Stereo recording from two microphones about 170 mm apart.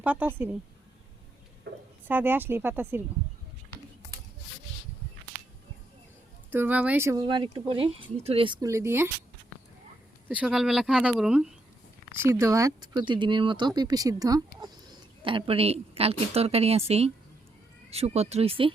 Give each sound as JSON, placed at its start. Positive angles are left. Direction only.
{"t": 0.0, "sound": "speech", "side_deg": -10}
{"t": 1.7, "sound": "a sound", "side_deg": -70}
{"t": 2.0, "sound": "speech", "side_deg": -10}
{"t": 6.5, "sound": "speech", "side_deg": -10}
{"t": 8.6, "sound": "speech", "side_deg": -15}
{"t": 10.2, "sound": "speech", "side_deg": -5}
{"t": 12.1, "sound": "a woman's voice", "side_deg": -15}